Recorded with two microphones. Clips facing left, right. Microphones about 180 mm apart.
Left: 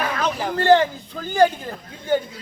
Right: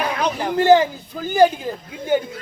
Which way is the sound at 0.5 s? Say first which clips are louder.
Right 2 dB; 10° right (ahead or behind).